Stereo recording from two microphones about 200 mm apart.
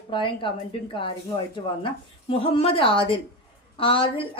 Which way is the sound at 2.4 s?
25° left (ahead or behind).